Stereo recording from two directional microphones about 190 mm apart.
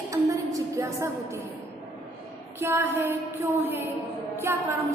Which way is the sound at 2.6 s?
10° right (ahead or behind).